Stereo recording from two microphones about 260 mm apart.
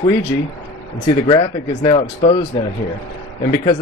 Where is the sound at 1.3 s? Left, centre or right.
Centre.